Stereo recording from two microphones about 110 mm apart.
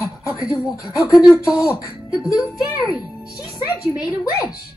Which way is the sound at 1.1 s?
5° right (ahead or behind).